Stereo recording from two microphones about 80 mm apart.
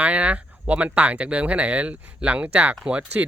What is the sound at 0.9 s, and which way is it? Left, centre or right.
Speech, centre.